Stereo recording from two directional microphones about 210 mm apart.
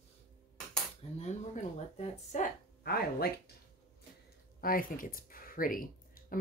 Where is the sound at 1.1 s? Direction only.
30° left (ahead or behind).